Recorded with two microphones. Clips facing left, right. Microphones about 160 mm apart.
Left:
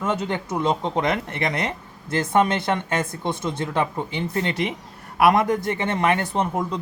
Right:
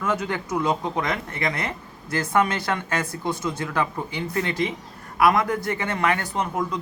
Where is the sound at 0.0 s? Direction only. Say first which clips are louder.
Left 1 dB; 25° left (ahead or behind).